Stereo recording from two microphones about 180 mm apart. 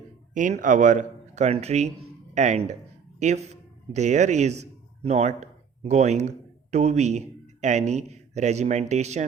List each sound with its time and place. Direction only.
0.3 s a man's voice: 45° right (ahead or behind)